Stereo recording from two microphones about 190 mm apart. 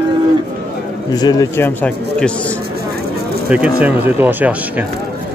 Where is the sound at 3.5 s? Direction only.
5° right (ahead or behind).